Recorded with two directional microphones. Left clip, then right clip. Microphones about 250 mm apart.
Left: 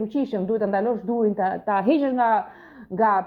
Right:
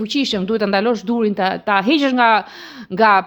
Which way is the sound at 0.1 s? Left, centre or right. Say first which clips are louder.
Right 8 dB; right.